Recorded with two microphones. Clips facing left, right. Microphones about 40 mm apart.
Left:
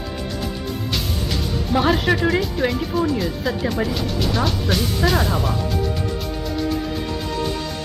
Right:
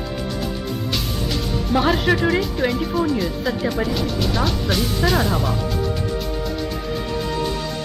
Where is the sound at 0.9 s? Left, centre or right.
Centre.